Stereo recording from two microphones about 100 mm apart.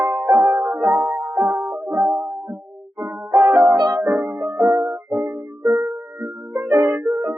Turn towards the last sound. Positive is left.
turn(degrees=-5)  # may be behind; listen again after turning